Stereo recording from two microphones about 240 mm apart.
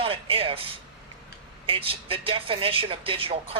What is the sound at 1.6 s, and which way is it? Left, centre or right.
Speech, right.